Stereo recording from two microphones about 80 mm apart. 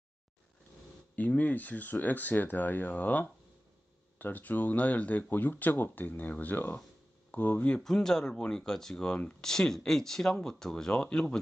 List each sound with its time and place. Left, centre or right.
1.1 s speech: centre